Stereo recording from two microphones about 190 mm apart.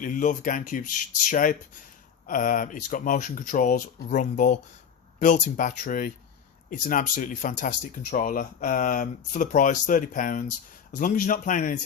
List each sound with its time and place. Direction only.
0.0 s speech: 45° left (ahead or behind)